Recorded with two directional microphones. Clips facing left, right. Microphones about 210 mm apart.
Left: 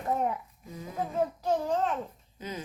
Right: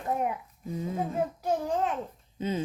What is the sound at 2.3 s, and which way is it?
Speech, 25° right (ahead or behind).